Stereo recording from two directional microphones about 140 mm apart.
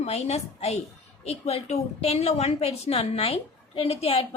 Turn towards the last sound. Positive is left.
turn(degrees=45)  # may be behind; listen again after turning